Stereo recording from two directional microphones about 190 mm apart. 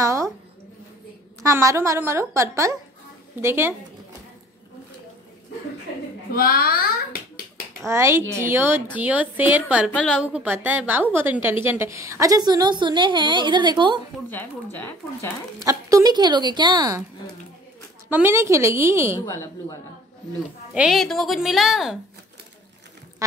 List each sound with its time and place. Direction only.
0.0 s a sound: 15° right (ahead or behind)
1.4 s a woman's voice: 15° right (ahead or behind)
6.3 s hands: 50° left (ahead or behind)
7.8 s a woman's voice: 15° right (ahead or behind)
9.8 s speech: 5° left (ahead or behind)
10.2 s a woman's voice: 5° right (ahead or behind); by 14.0 s 25° right (ahead or behind)
14.3 s speech: 10° left (ahead or behind)
15.6 s a woman's voice: 15° right (ahead or behind)
18.1 s a woman's voice: 15° right (ahead or behind)
19.2 s speech: 15° left (ahead or behind)
20.7 s a woman's voice: 5° right (ahead or behind)